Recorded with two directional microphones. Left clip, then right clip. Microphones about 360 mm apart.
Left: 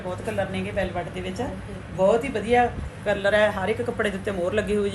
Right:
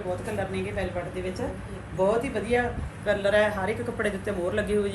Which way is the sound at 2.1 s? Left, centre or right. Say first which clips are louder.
Left 5 dB; centre.